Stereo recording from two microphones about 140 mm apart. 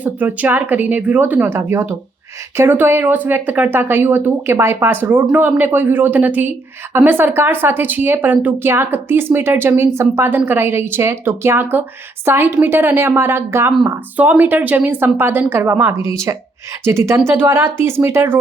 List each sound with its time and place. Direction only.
0.0 s speech: 10° right (ahead or behind)